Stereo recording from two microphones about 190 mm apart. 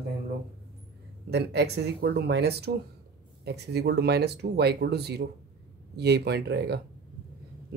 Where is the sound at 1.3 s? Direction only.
60° right (ahead or behind).